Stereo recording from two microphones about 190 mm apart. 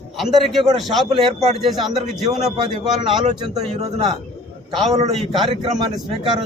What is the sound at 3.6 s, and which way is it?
Speech, 30° right (ahead or behind).